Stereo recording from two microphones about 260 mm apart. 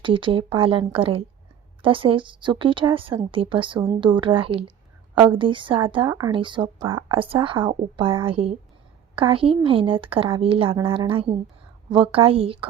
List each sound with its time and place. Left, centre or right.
0.0 s a woman's voice: centre